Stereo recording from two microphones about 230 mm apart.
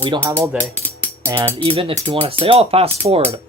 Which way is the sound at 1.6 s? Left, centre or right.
Right.